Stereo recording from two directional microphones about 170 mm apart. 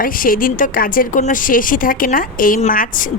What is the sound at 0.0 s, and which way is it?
A woman's voice, 55° left (ahead or behind).